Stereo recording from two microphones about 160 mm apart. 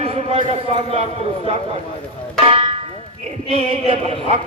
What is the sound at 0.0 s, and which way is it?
Speech, 40° right (ahead or behind).